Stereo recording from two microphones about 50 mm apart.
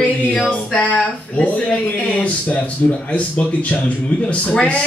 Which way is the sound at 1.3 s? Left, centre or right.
Left.